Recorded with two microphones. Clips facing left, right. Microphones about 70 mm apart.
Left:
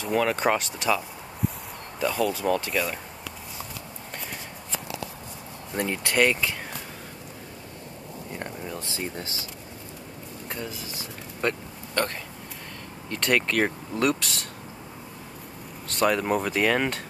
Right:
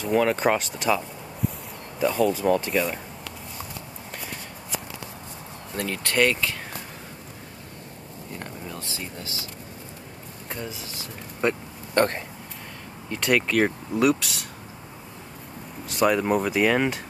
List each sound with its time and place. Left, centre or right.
0.0 s speech: centre
5.8 s speech: left
8.4 s a sound: left
11.4 s speech: centre
11.9 s speech: right
13.1 s speech: centre
15.9 s speech: centre